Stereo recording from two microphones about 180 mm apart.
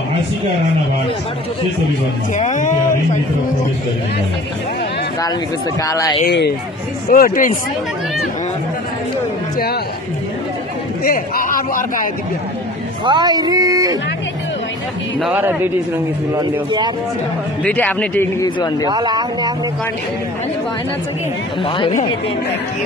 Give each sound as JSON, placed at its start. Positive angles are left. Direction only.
{"t": 2.3, "sound": "speech", "side_deg": 45}
{"t": 5.8, "sound": "a man's voice", "side_deg": 20}
{"t": 6.2, "sound": "speech", "side_deg": 65}
{"t": 7.1, "sound": "speech", "side_deg": 50}
{"t": 11.1, "sound": "a man's voice", "side_deg": 50}
{"t": 13.0, "sound": "speech", "side_deg": -25}
{"t": 15.1, "sound": "speech", "side_deg": -5}
{"t": 16.3, "sound": "speech", "side_deg": -25}
{"t": 17.6, "sound": "a man's voice", "side_deg": 10}
{"t": 18.9, "sound": "speech", "side_deg": -25}
{"t": 21.6, "sound": "a man's voice", "side_deg": 30}